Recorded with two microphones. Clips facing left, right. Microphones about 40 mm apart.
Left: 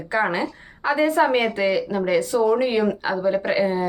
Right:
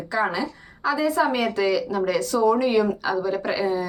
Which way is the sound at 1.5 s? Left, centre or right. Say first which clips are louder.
Left 1 dB; left.